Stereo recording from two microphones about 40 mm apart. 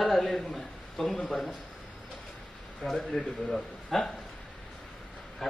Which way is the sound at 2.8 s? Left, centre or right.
Centre.